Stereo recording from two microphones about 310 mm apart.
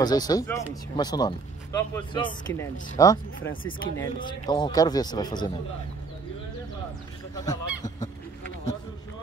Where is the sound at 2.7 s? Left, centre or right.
Left.